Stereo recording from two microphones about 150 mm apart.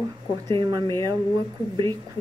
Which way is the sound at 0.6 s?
30° right (ahead or behind).